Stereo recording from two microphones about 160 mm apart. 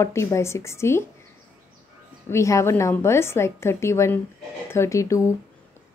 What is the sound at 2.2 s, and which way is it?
Speech, 20° left (ahead or behind).